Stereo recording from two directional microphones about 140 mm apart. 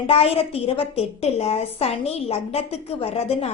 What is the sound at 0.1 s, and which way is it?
A woman's voice, 45° left (ahead or behind).